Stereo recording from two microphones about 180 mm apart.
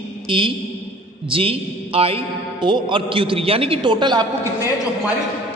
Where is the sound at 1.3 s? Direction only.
30° right (ahead or behind).